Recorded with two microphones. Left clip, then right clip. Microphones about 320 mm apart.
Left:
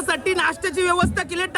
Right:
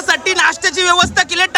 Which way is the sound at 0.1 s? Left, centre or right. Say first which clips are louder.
Right 8 dB; centre.